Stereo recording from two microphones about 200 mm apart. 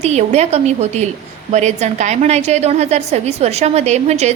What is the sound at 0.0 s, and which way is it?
A woman's voice, 35° right (ahead or behind).